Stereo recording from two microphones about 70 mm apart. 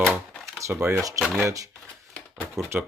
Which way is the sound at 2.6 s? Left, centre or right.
Right.